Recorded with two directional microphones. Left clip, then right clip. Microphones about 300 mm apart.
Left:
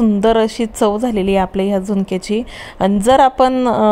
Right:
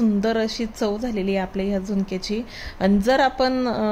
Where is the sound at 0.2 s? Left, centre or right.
Left.